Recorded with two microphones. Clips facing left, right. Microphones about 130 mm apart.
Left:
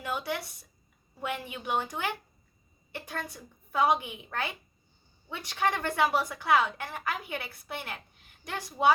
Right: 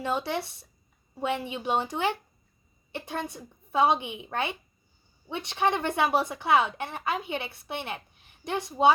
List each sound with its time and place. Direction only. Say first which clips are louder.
0.0 s a woman's voice: right 4 dB; 30° right (ahead or behind)